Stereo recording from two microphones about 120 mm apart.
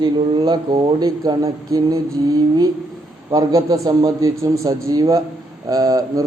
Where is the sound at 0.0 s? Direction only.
35° right (ahead or behind).